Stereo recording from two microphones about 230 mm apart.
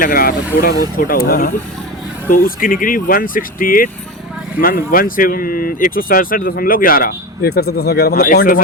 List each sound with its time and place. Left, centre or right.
0.0 s speech: left